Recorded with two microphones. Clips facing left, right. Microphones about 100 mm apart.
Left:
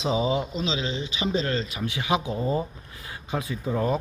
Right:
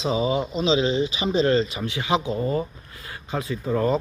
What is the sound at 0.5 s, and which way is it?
Speech, 5° right (ahead or behind).